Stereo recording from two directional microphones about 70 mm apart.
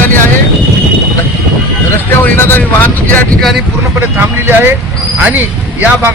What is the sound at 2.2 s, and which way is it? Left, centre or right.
Speech, left.